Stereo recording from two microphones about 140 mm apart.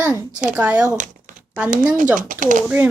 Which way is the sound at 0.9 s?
65° right (ahead or behind).